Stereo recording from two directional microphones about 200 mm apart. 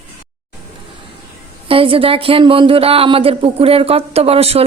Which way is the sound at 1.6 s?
25° right (ahead or behind).